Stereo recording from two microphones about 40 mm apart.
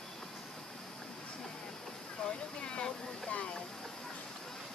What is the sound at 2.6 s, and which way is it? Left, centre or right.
Speech, left.